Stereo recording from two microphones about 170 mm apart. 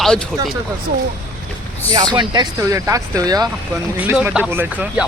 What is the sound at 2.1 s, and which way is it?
Speech, 25° right (ahead or behind).